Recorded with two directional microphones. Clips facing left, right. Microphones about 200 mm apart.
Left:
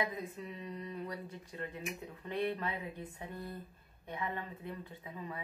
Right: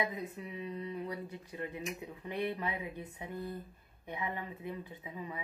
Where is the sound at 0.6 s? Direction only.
10° right (ahead or behind).